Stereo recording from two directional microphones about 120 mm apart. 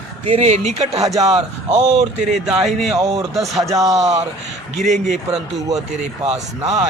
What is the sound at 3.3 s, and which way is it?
Speech, centre (ahead or behind).